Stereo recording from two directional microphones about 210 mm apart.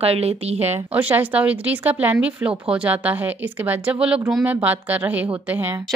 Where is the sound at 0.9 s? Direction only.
10° right (ahead or behind).